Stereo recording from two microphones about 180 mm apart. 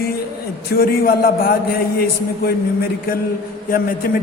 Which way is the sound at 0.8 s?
55° left (ahead or behind).